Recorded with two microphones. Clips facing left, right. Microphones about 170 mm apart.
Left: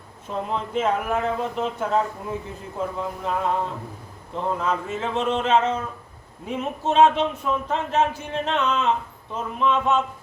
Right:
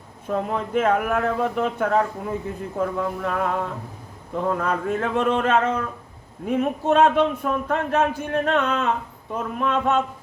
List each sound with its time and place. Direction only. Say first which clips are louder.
0.3 s a man's voice: right 3 dB; 55° right (ahead or behind)